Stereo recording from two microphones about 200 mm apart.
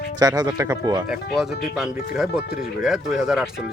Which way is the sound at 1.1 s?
5° right (ahead or behind).